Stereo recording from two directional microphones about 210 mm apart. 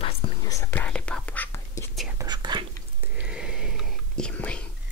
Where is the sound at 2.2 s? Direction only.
20° right (ahead or behind).